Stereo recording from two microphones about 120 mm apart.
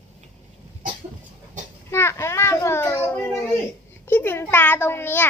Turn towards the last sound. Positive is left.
turn(degrees=20)  # may be behind; listen again after turning